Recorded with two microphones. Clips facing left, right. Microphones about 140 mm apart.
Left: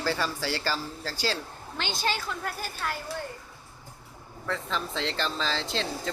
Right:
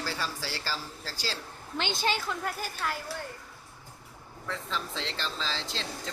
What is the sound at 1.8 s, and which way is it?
Speech, 20° right (ahead or behind).